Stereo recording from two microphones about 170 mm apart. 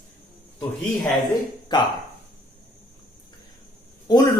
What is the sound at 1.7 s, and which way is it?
Speech, 25° left (ahead or behind).